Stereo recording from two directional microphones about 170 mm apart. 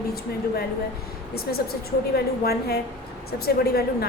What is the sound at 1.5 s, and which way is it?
A woman's voice, 65° left (ahead or behind).